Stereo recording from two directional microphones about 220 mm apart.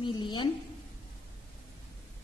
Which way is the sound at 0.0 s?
20° left (ahead or behind).